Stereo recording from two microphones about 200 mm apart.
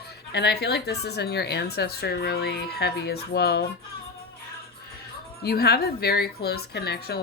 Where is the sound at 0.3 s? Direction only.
55° left (ahead or behind).